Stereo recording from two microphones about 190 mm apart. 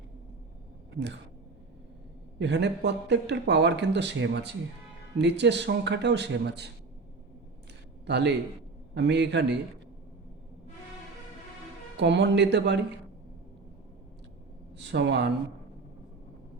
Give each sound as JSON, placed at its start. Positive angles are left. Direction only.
{"t": 2.4, "sound": "speech", "side_deg": -65}
{"t": 8.0, "sound": "a man's voice", "side_deg": -65}
{"t": 11.9, "sound": "speech", "side_deg": -65}
{"t": 14.9, "sound": "speech", "side_deg": -65}